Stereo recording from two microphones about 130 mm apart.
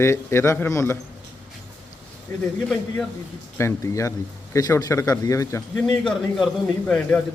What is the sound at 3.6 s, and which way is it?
A man's voice, 20° left (ahead or behind).